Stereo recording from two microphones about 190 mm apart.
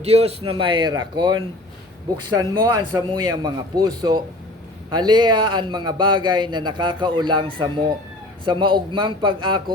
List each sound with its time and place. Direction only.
0.0 s a man's voice: 35° right (ahead or behind)